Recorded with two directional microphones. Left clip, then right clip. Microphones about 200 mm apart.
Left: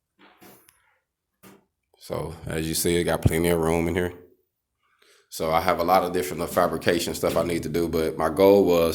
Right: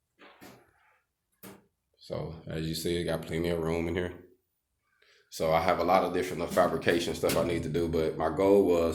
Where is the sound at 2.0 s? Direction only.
35° left (ahead or behind).